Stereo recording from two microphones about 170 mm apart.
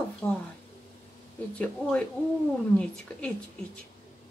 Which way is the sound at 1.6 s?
5° left (ahead or behind).